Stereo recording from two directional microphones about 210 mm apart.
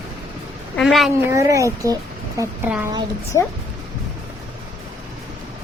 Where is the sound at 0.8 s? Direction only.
Centre (ahead or behind).